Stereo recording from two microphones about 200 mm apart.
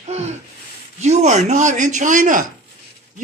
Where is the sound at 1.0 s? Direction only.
35° right (ahead or behind).